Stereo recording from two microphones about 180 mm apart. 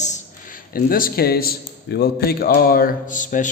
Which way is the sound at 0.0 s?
45° left (ahead or behind).